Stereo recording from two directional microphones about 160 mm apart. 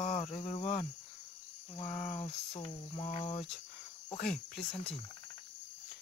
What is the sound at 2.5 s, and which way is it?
Cricket, 35° left (ahead or behind).